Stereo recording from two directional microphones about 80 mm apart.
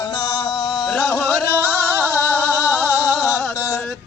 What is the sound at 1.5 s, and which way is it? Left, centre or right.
Music, right.